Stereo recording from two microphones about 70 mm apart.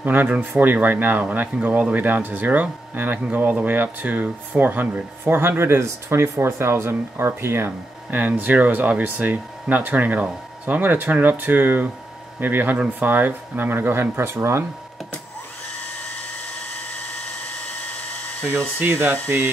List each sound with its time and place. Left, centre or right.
0.0 s speech: right
18.8 s speech: right